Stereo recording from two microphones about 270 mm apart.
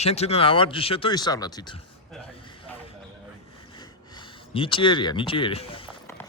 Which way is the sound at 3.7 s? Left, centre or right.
Centre.